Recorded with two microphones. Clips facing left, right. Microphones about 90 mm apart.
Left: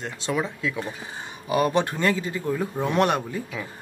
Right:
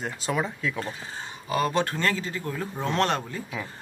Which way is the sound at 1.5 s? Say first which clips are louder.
Left 3 dB; 15° left (ahead or behind).